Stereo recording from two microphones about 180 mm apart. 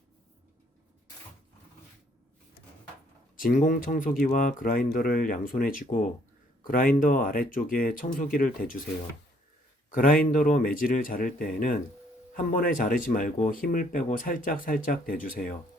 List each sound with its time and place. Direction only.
3.3 s speech: 50° left (ahead or behind)
9.9 s speech: 50° left (ahead or behind)